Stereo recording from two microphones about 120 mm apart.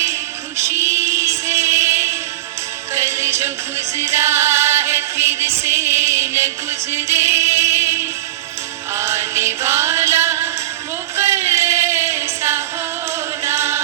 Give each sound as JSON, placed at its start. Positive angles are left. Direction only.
{"t": 0.0, "sound": "music", "side_deg": -25}
{"t": 11.2, "sound": "a sound", "side_deg": -20}
{"t": 13.1, "sound": "music", "side_deg": -20}